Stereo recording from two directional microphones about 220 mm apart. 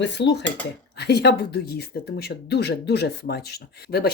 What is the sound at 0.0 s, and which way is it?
Speech, 50° left (ahead or behind).